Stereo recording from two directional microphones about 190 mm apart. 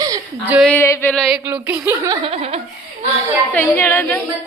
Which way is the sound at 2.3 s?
30° right (ahead or behind).